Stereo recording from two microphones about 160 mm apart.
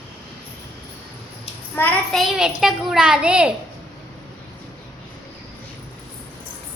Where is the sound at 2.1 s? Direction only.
Centre (ahead or behind).